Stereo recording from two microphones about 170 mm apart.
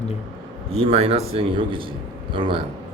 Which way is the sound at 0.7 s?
35° right (ahead or behind).